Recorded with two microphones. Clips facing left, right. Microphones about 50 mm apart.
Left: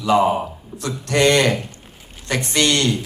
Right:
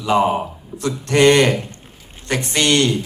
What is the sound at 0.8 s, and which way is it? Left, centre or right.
A man's voice, right.